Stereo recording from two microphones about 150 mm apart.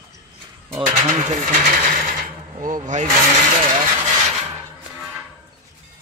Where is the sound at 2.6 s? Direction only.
60° right (ahead or behind).